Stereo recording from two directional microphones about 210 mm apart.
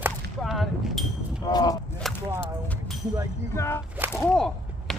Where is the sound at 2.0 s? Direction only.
Centre (ahead or behind).